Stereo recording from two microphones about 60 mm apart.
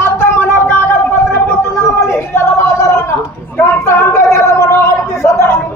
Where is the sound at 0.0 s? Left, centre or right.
Left.